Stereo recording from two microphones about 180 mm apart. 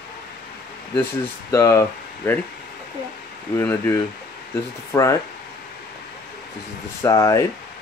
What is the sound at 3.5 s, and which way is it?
Speech, 15° left (ahead or behind).